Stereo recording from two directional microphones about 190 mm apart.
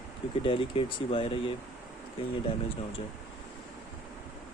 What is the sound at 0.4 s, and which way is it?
Speech, 25° left (ahead or behind).